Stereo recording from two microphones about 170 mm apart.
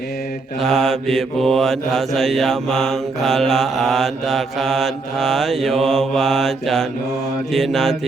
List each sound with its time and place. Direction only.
0.6 s mantra: centre (ahead or behind)